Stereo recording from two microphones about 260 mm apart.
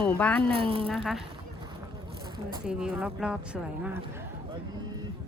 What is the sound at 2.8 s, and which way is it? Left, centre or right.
Speech, centre.